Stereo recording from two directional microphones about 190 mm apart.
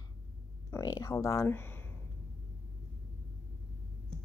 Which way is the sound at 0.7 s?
15° left (ahead or behind).